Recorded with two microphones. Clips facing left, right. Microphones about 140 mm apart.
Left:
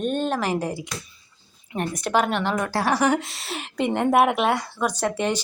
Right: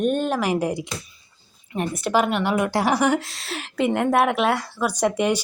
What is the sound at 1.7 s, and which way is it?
A woman's voice, centre (ahead or behind).